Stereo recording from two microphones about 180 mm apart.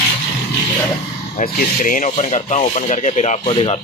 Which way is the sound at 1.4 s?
45° left (ahead or behind).